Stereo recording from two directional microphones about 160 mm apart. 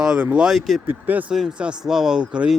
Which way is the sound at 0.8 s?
10° right (ahead or behind).